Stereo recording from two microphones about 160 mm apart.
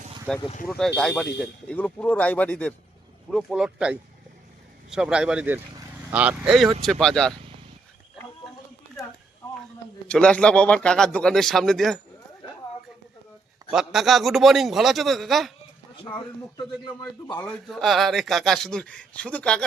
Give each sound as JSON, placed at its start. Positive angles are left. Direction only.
{"t": 0.3, "sound": "speech", "side_deg": 0}
{"t": 3.3, "sound": "speech", "side_deg": -5}
{"t": 10.1, "sound": "speech", "side_deg": 5}
{"t": 13.7, "sound": "speech", "side_deg": 0}
{"t": 16.0, "sound": "speech", "side_deg": 30}
{"t": 17.5, "sound": "speech", "side_deg": 0}